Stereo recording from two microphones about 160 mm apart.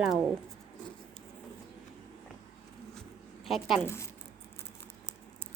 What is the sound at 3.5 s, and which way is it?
Speech, centre (ahead or behind).